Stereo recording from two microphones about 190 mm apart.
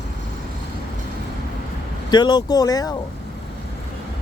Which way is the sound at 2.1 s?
20° left (ahead or behind).